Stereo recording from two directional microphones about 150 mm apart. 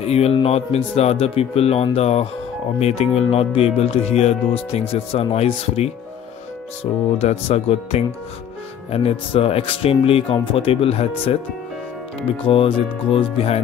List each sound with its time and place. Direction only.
0.0 s speech: 45° left (ahead or behind)
12.4 s speech: 35° left (ahead or behind)